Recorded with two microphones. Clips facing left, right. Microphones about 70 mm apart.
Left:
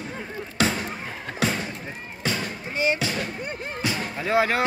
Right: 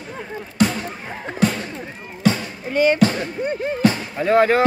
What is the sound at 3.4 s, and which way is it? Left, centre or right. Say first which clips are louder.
Speech: right 10 dB; right.